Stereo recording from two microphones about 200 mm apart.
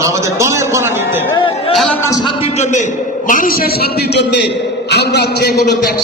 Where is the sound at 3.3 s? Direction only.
45° left (ahead or behind).